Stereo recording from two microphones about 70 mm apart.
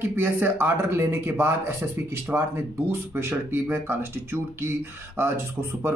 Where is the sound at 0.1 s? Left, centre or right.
Right.